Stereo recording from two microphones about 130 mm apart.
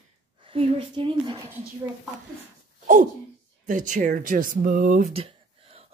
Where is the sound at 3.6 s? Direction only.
80° right.